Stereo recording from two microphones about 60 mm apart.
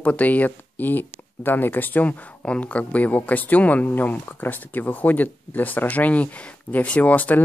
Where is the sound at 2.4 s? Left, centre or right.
Left.